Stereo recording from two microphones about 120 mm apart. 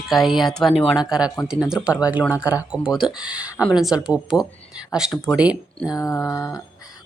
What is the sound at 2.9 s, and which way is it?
Speech, 5° right (ahead or behind).